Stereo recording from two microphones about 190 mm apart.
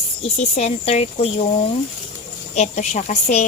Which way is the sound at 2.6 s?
35° left (ahead or behind).